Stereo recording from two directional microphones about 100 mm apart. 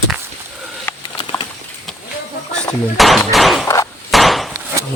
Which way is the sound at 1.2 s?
60° left (ahead or behind).